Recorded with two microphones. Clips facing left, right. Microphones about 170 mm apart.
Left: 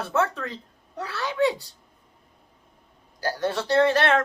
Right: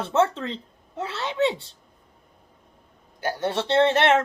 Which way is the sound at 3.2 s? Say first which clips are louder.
Right 1 dB; 20° right (ahead or behind).